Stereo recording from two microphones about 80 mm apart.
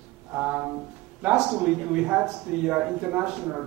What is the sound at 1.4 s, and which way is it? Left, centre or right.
Speech, centre.